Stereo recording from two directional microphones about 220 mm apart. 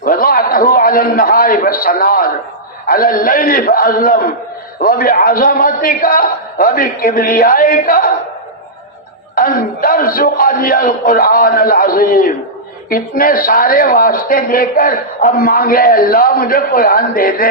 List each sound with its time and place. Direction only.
0.0 s a man's voice: 40° left (ahead or behind)
9.3 s speech: 40° left (ahead or behind)